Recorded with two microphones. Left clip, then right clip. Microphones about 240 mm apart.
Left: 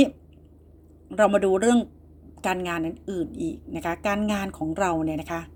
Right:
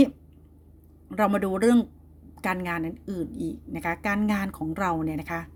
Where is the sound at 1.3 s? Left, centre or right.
Right.